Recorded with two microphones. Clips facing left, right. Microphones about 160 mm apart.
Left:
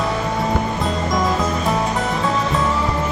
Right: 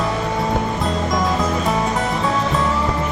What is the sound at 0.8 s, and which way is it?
Music, centre (ahead or behind).